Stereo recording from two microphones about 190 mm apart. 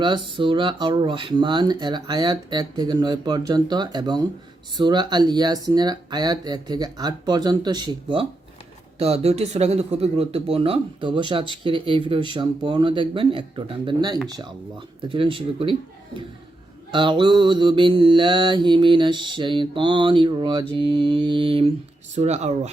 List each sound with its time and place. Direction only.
0.0 s mantra: 25° right (ahead or behind)
9.0 s speech: 35° right (ahead or behind)
11.5 s mantra: 25° right (ahead or behind)
16.9 s mantra: 25° right (ahead or behind)
22.1 s speech: 35° right (ahead or behind)